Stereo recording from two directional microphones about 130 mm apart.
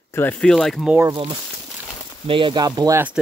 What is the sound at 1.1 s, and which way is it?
Speech, 40° right (ahead or behind).